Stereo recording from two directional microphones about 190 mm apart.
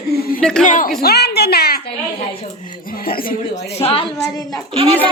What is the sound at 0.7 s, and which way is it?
Speech, 45° left (ahead or behind).